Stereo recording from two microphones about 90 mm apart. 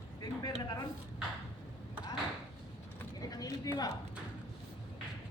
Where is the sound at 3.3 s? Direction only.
45° left (ahead or behind).